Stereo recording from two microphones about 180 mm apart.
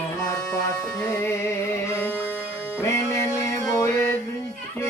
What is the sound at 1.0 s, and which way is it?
Music, 15° left (ahead or behind).